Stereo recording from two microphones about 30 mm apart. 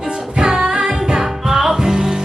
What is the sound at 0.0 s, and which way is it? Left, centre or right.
Music, right.